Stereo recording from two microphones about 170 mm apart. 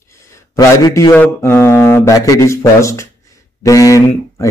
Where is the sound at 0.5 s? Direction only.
20° left (ahead or behind).